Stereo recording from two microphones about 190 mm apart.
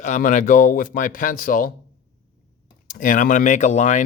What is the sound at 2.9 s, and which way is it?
A man's voice, 45° left (ahead or behind).